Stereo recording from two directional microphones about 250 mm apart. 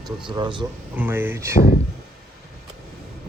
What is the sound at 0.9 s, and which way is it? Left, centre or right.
Speech, centre.